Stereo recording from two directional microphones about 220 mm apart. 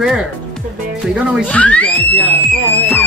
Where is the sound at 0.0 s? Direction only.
Centre (ahead or behind).